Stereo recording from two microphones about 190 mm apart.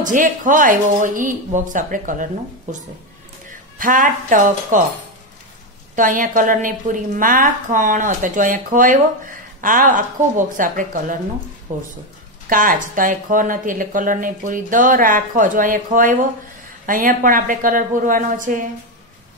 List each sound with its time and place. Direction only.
0.0 s a woman's voice: 45° right (ahead or behind)
3.7 s a woman's voice: 45° right (ahead or behind)
5.9 s a woman's voice: 45° right (ahead or behind)